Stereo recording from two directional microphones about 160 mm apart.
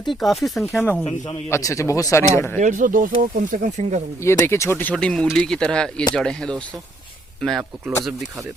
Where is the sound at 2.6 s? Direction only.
55° right (ahead or behind).